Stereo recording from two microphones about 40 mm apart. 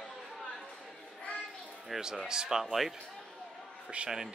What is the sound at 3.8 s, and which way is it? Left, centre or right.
Speech, right.